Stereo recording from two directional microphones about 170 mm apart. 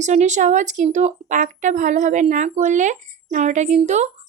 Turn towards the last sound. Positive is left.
turn(degrees=-40)  # may be behind; listen again after turning